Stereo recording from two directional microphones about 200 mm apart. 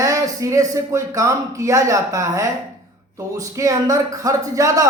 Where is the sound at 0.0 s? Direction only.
15° right (ahead or behind).